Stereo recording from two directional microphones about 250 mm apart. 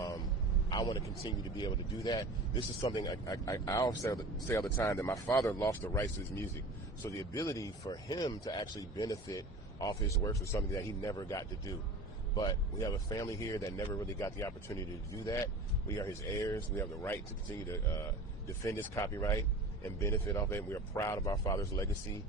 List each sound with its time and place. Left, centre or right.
0.7 s speech: centre
18.6 s speech: centre